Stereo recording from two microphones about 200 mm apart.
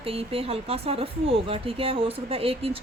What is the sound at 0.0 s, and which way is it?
Speech, 30° right (ahead or behind).